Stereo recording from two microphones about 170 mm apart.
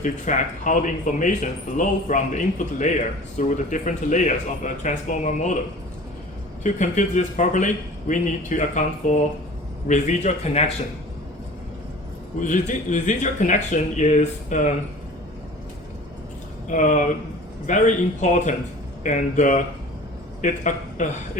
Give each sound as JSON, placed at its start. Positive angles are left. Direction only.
{"t": 0.0, "sound": "speech", "side_deg": 50}
{"t": 6.6, "sound": "speech", "side_deg": 45}
{"t": 12.4, "sound": "speech", "side_deg": 45}
{"t": 16.7, "sound": "speech", "side_deg": 50}